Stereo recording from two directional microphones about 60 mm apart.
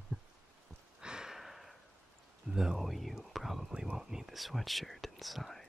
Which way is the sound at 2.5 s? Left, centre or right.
Centre.